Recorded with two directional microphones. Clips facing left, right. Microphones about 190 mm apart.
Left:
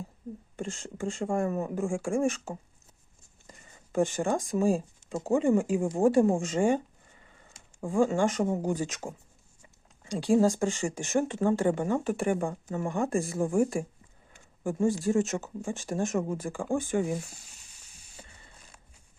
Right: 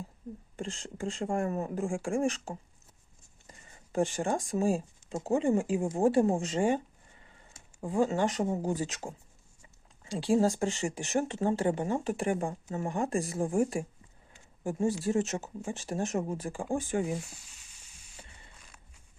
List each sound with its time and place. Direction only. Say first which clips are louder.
0.6 s speech: left 2 dB; 45° left (ahead or behind)
3.9 s speech: left 2 dB; 45° left (ahead or behind)